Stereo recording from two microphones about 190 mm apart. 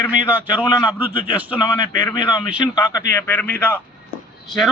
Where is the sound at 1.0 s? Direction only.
10° right (ahead or behind).